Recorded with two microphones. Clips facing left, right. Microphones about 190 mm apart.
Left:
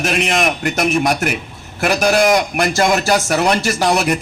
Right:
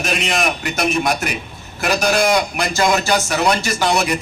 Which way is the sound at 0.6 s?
45° left (ahead or behind).